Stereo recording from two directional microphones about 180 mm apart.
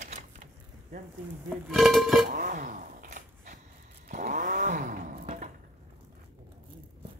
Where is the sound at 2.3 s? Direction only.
50° right (ahead or behind).